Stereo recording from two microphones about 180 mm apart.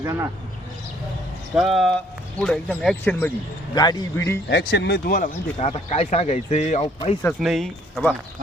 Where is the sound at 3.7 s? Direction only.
20° left (ahead or behind).